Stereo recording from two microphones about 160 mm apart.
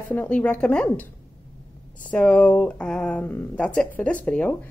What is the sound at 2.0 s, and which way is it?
A woman's voice, 10° left (ahead or behind).